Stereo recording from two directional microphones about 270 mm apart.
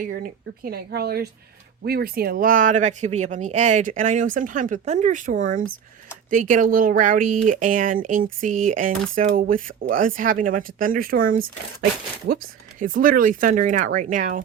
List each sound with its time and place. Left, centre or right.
0.0 s speech: right